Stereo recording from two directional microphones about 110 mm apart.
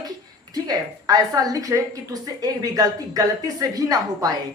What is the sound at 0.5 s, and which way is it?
Speech, 35° right (ahead or behind).